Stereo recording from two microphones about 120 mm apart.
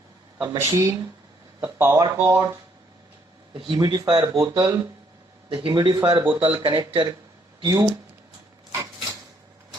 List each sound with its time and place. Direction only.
0.6 s speech: 25° right (ahead or behind)
3.5 s speech: 40° right (ahead or behind)
5.5 s speech: 40° right (ahead or behind)
6.1 s speech: 45° right (ahead or behind)
8.7 s a sound: 25° right (ahead or behind)